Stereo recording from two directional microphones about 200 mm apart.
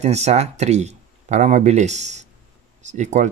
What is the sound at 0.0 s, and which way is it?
Speech, 35° right (ahead or behind).